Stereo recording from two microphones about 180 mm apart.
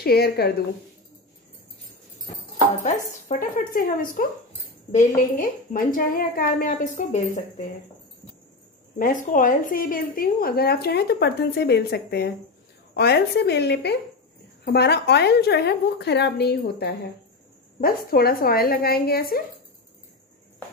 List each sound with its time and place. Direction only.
0.0 s a woman's voice: 60° left (ahead or behind)
2.8 s a woman's voice: 45° left (ahead or behind)
8.9 s a woman's voice: 45° left (ahead or behind)